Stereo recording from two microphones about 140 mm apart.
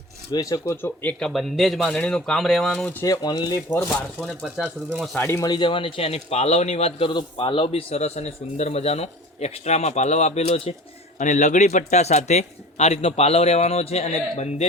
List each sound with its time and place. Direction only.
0.3 s speech: 25° left (ahead or behind)
0.7 s speech: 15° left (ahead or behind)
1.2 s speech: centre (ahead or behind)
3.0 s speech: 30° left (ahead or behind)
3.8 s speech: 5° left (ahead or behind)
5.1 s speech: 15° left (ahead or behind)
5.5 s a man's voice: 35° left (ahead or behind)
7.1 s a man's voice: 35° left (ahead or behind)
11.2 s a man's voice: 60° left (ahead or behind)